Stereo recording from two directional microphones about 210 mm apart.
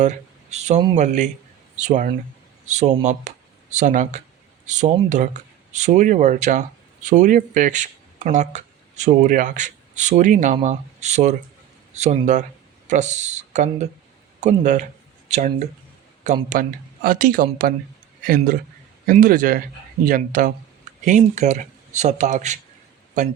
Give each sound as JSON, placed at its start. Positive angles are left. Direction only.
{"t": 0.0, "sound": "speech", "side_deg": -35}
{"t": 19.0, "sound": "speech", "side_deg": -40}